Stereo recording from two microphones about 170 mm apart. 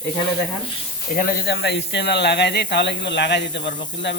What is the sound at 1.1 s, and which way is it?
Speech, 55° left (ahead or behind).